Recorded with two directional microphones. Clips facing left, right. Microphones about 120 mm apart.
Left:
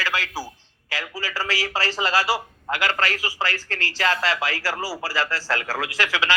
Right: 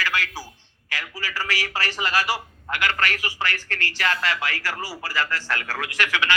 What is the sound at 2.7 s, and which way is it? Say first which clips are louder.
A man's voice: left 1 dB; 30° left (ahead or behind).